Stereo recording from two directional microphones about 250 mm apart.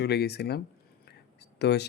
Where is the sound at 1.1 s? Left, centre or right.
Left.